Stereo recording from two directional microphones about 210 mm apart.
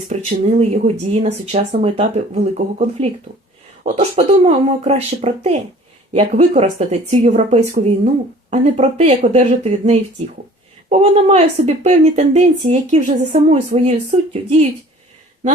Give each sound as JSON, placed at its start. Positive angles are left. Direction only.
{"t": 0.1, "sound": "speech", "side_deg": -30}